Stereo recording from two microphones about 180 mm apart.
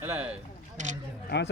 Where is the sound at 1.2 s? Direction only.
75° left (ahead or behind).